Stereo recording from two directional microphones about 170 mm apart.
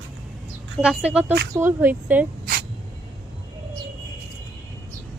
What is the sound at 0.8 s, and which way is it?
Speech, 5° right (ahead or behind).